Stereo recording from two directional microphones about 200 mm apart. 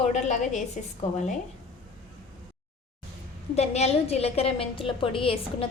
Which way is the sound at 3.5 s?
35° left (ahead or behind).